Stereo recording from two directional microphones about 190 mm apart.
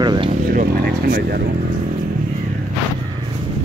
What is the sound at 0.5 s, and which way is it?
Vehicle, 50° right (ahead or behind).